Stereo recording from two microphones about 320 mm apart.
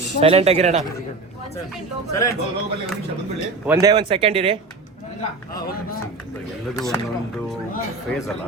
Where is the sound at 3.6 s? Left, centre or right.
Centre.